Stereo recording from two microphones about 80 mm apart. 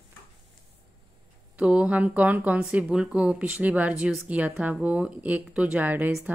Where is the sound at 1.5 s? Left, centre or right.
Centre.